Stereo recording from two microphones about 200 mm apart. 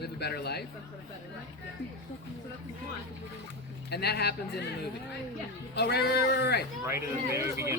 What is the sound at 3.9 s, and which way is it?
Speech, 55° left (ahead or behind).